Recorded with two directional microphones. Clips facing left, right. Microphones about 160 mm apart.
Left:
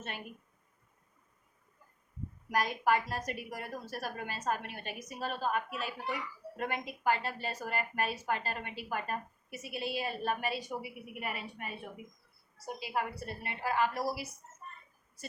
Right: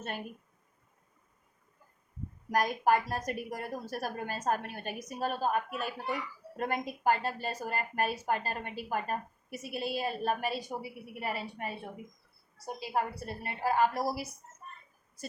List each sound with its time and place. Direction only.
2.5 s a woman's voice: 45° right (ahead or behind)